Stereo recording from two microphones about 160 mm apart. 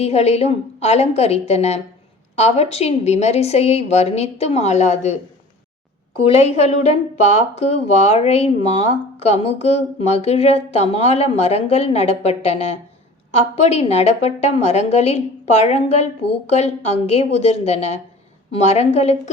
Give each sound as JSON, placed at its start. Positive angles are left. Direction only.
{"t": 0.0, "sound": "speech", "side_deg": 40}
{"t": 6.2, "sound": "speech", "side_deg": 40}